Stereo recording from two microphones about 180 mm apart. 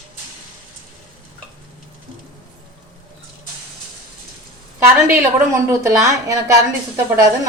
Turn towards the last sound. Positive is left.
turn(degrees=-20)  # may be behind; listen again after turning